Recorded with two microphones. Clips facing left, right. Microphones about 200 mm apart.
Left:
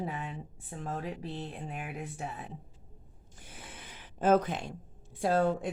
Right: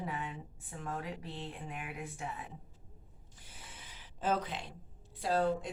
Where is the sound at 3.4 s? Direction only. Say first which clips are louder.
Left 6 dB; 60° left (ahead or behind).